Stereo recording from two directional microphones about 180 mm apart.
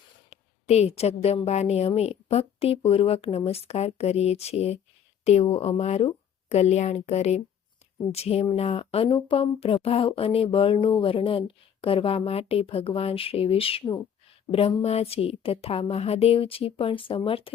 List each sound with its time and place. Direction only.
0.3 s speech: 35° left (ahead or behind)